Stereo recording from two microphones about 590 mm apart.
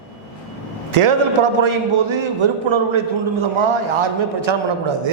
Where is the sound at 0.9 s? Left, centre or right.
Right.